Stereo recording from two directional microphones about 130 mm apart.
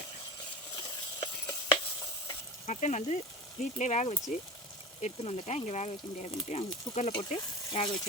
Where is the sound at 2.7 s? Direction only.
65° left (ahead or behind).